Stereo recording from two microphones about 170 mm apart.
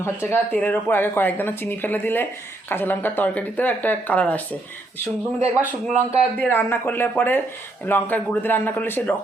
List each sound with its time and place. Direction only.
0.0 s speech: 15° left (ahead or behind)
5.9 s speech: 40° right (ahead or behind)
6.4 s speech: 10° left (ahead or behind)